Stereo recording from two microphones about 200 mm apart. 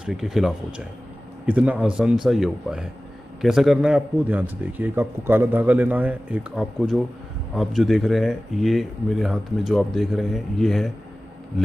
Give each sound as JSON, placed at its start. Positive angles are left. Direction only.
{"t": 0.0, "sound": "a man's voice", "side_deg": 0}